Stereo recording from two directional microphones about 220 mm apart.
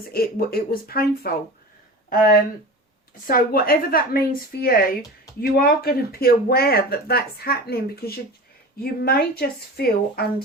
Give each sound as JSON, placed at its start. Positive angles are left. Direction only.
{"t": 0.1, "sound": "speech", "side_deg": 45}